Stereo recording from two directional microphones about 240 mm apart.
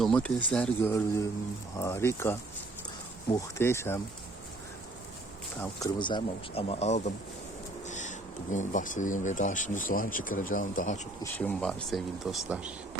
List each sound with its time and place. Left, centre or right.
0.0 s speech: centre
5.5 s speech: centre; by 11.0 s left
11.2 s speech: centre